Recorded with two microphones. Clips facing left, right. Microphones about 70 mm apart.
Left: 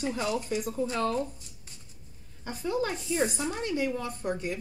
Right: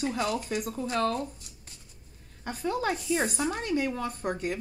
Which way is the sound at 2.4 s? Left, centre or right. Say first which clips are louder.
Right 1 dB; right.